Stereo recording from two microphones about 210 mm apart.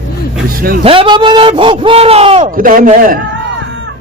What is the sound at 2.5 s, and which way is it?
Speech, 40° right (ahead or behind).